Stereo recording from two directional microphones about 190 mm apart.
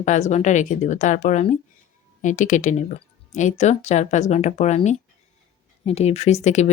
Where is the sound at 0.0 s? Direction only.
40° left (ahead or behind).